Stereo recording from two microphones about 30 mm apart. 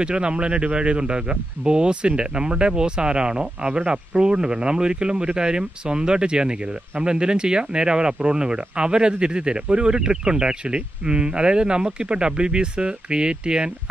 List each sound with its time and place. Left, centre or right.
0.0 s speech: right